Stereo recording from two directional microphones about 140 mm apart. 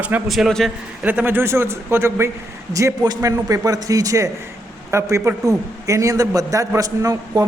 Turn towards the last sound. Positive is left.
turn(degrees=-25)  # may be behind; listen again after turning